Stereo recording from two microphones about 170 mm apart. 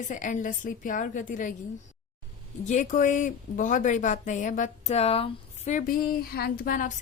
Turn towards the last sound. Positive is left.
turn(degrees=55)  # may be behind; listen again after turning